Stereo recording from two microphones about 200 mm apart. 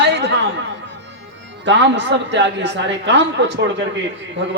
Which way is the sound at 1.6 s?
65° right (ahead or behind).